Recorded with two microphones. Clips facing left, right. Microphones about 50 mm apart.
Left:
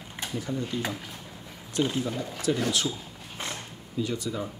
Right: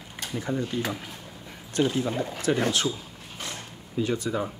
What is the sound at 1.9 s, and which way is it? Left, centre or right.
Speech, right.